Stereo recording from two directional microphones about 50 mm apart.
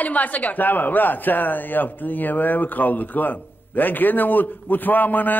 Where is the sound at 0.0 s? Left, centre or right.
Left.